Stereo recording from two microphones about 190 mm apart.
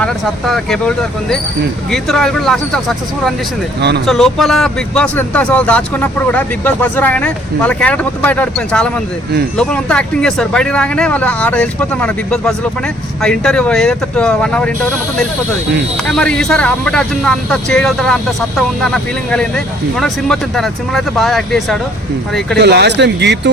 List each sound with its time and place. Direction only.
0.0 s speech: centre (ahead or behind)
3.8 s speech: 60° right (ahead or behind)
4.0 s speech: centre (ahead or behind)
16.0 s speech: 5° left (ahead or behind)
22.5 s speech: 60° right (ahead or behind)